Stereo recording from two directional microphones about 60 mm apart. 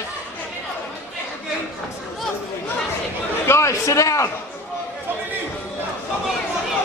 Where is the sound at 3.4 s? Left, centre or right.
Left.